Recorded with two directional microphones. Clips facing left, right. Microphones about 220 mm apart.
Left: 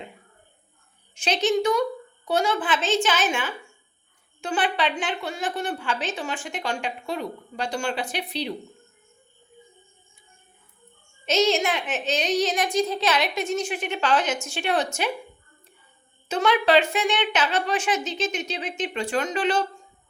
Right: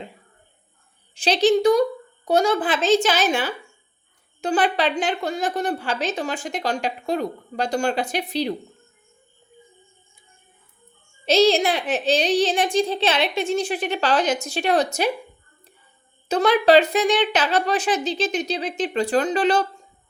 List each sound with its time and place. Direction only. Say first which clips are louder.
1.1 s a woman's voice: right 5 dB; 35° right (ahead or behind)
11.3 s a woman's voice: right 5 dB; 35° right (ahead or behind)
16.3 s a woman's voice: right 4 dB; 35° right (ahead or behind)